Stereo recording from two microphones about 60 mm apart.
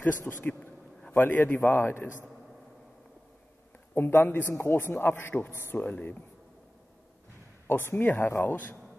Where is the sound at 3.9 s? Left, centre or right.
Left.